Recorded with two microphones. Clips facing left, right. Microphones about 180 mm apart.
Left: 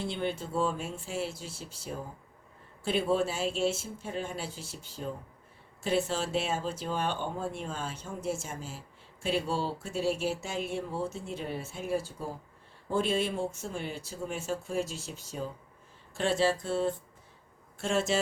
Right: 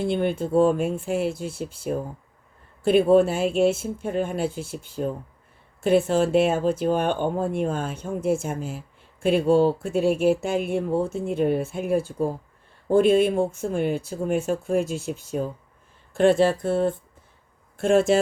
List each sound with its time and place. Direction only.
0.0 s speech: 55° right (ahead or behind)